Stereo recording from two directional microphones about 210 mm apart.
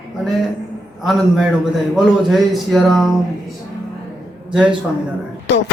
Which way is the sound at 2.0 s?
Centre (ahead or behind).